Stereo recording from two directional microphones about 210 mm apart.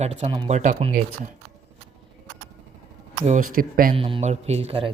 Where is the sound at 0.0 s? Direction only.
30° right (ahead or behind).